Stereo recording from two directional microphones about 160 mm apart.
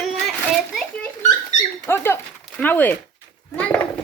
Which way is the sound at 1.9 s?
15° left (ahead or behind).